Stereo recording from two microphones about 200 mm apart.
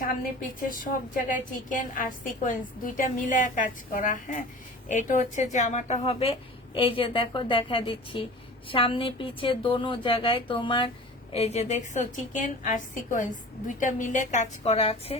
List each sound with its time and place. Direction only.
0.6 s a woman's voice: 40° left (ahead or behind)